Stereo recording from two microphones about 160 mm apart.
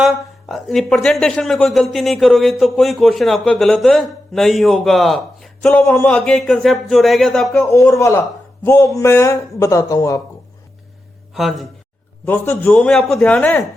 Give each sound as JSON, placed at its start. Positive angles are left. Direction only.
{"t": 0.4, "sound": "speech", "side_deg": 0}
{"t": 5.8, "sound": "a man's voice", "side_deg": 20}
{"t": 6.1, "sound": "speech", "side_deg": 5}
{"t": 7.7, "sound": "a man's voice", "side_deg": 20}
{"t": 11.3, "sound": "speech", "side_deg": 0}
{"t": 12.2, "sound": "a man's voice", "side_deg": 10}